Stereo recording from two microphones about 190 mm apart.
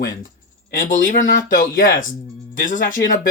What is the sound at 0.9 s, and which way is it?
Speech, 45° left (ahead or behind).